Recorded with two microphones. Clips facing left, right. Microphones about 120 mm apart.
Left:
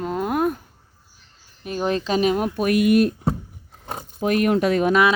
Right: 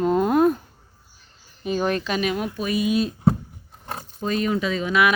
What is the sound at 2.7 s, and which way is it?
Speech, 70° left (ahead or behind).